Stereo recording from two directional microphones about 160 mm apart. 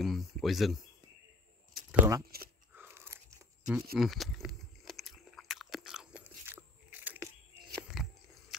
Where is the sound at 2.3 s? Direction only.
75° right (ahead or behind).